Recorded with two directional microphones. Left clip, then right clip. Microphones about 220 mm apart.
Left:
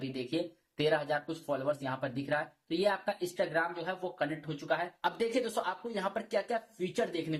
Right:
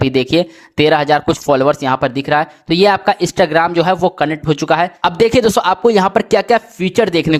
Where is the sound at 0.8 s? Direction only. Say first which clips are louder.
Right 19 dB; 45° right (ahead or behind).